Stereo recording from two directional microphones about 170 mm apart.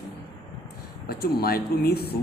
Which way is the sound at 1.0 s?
65° left (ahead or behind).